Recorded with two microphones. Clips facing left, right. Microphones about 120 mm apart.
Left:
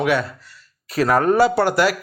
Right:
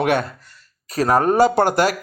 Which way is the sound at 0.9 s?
35° right (ahead or behind).